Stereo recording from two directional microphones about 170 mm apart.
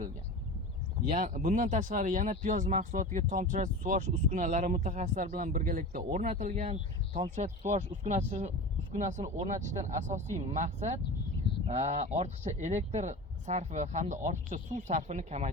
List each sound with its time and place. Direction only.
1.1 s speech: 50° right (ahead or behind)